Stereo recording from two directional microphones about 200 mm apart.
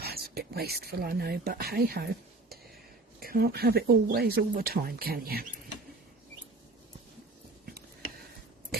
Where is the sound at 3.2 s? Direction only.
50° right (ahead or behind).